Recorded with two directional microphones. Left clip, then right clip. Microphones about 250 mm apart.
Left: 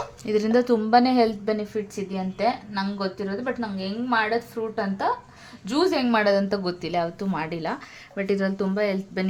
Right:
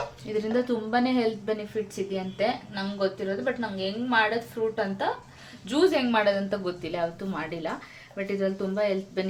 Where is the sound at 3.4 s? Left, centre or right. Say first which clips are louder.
Even; left.